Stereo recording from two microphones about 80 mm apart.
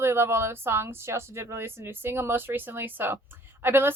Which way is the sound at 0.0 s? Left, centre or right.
Right.